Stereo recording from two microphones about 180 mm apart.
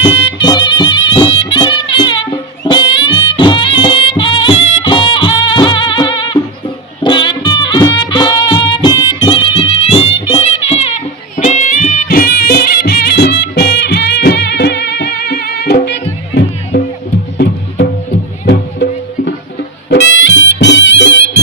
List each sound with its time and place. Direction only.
0.0 s music: 30° left (ahead or behind); by 16.0 s 65° left (ahead or behind)
17.3 s music: 65° left (ahead or behind)
19.9 s music: 80° left